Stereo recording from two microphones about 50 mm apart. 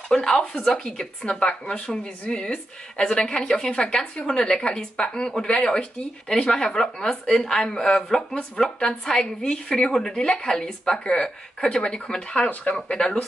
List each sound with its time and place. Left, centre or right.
0.1 s speech: centre